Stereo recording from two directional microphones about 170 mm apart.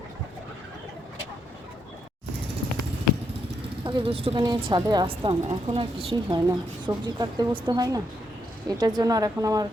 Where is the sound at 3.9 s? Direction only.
30° right (ahead or behind).